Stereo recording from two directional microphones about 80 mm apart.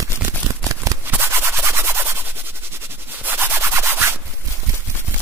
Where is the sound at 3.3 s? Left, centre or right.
Right.